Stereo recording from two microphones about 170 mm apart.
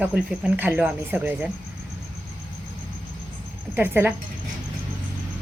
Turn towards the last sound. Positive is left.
turn(degrees=-10)  # may be behind; listen again after turning